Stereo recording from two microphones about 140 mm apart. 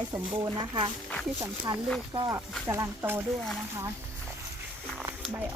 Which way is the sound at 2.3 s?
20° right (ahead or behind).